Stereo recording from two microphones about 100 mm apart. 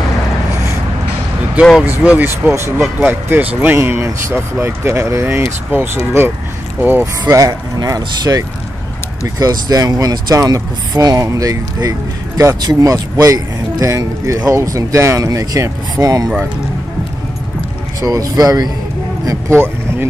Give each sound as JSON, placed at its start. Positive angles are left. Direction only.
{"t": 1.5, "sound": "speech", "side_deg": -5}
{"t": 7.3, "sound": "speech", "side_deg": -35}
{"t": 18.0, "sound": "speech", "side_deg": -35}